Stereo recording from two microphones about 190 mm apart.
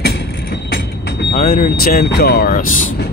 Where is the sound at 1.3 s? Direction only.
45° left (ahead or behind).